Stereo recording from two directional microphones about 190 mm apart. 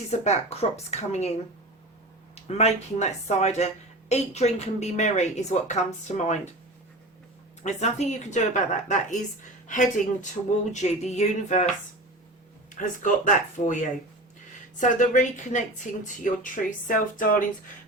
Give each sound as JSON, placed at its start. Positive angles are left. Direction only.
{"t": 0.1, "sound": "speech", "side_deg": 35}
{"t": 2.3, "sound": "speech", "side_deg": 35}
{"t": 7.6, "sound": "speech", "side_deg": 35}
{"t": 12.7, "sound": "speech", "side_deg": 40}